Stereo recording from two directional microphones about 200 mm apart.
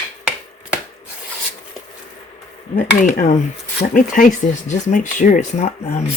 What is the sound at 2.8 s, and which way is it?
Speech, 40° left (ahead or behind).